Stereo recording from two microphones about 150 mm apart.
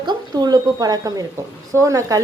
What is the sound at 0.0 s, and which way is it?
Speech, 30° right (ahead or behind).